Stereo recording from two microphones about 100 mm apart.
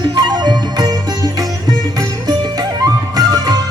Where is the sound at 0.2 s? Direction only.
45° right (ahead or behind).